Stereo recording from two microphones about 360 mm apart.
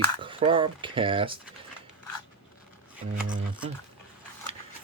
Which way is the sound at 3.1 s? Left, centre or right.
Right.